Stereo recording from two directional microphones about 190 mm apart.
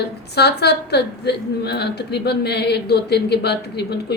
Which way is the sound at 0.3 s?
60° left (ahead or behind).